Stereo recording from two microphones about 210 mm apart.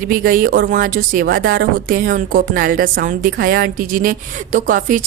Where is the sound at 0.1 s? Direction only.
40° right (ahead or behind).